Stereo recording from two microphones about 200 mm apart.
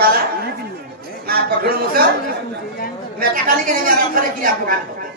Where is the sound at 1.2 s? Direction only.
50° right (ahead or behind).